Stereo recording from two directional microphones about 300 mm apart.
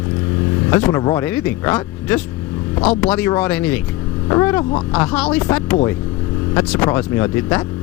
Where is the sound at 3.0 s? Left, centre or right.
Centre.